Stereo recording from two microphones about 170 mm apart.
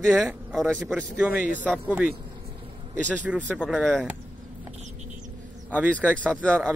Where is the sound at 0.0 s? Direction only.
5° left (ahead or behind).